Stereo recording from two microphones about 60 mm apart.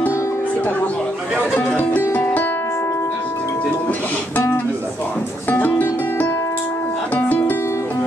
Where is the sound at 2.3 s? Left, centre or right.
Left.